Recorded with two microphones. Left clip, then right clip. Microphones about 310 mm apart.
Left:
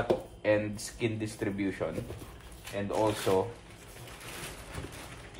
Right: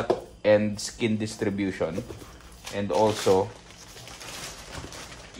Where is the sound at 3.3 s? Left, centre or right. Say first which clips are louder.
Right 6 dB; right.